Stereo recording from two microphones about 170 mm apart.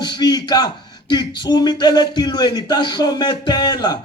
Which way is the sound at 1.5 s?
25° left (ahead or behind).